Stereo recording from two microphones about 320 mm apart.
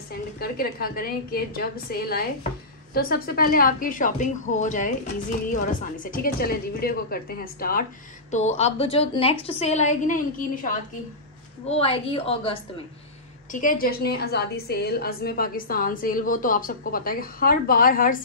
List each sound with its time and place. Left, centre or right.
0.1 s a woman's voice: left